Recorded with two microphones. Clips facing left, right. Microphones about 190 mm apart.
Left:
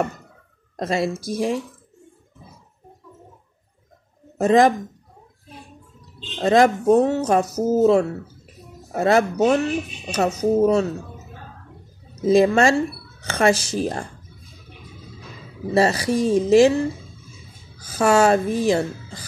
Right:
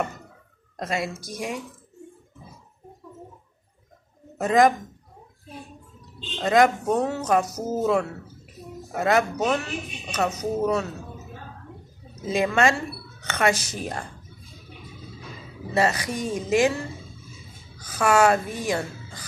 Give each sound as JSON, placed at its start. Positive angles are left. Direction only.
{"t": 0.7, "sound": "a woman's voice", "side_deg": 30}
{"t": 4.4, "sound": "speech", "side_deg": 30}
{"t": 6.4, "sound": "a woman's voice", "side_deg": 30}
{"t": 12.3, "sound": "a woman's voice", "side_deg": 30}
{"t": 15.7, "sound": "a woman's voice", "side_deg": 35}
{"t": 17.8, "sound": "speech", "side_deg": 30}